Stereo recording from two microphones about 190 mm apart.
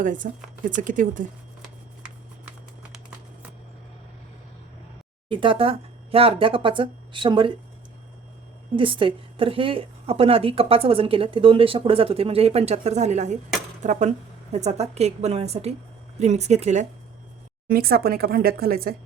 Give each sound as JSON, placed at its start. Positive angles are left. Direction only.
{"t": 0.0, "sound": "speech", "side_deg": -45}
{"t": 5.3, "sound": "a woman's voice", "side_deg": -25}
{"t": 8.7, "sound": "a woman's voice", "side_deg": -25}
{"t": 17.7, "sound": "speech", "side_deg": -50}